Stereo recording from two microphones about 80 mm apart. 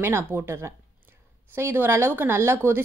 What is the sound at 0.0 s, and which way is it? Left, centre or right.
A woman's voice, right.